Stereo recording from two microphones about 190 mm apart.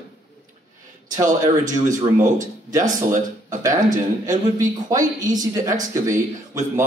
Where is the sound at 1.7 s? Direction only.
40° right (ahead or behind).